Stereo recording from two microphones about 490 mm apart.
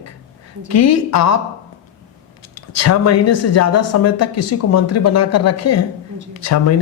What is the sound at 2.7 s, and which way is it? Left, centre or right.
A man's voice, left.